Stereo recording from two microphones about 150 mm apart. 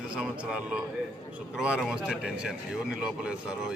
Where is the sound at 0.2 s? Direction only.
5° right (ahead or behind).